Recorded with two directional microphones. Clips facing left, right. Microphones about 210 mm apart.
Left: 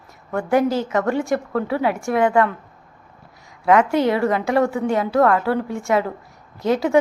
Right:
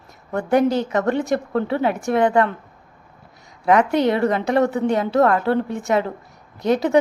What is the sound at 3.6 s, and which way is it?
A woman's voice, 20° right (ahead or behind).